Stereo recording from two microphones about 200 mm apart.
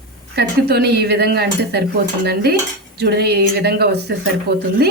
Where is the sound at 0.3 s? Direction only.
55° right (ahead or behind).